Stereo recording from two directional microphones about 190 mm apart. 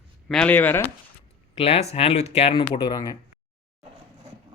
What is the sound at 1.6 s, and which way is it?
Speech, 30° left (ahead or behind).